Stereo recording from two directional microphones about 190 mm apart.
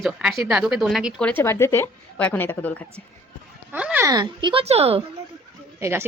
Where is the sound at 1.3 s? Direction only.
10° left (ahead or behind).